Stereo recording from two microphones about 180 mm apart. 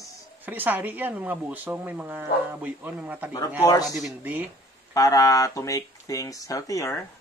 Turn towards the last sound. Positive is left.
turn(degrees=15)  # may be behind; listen again after turning